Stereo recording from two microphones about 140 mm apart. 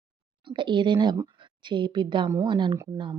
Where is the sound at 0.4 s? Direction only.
35° right (ahead or behind).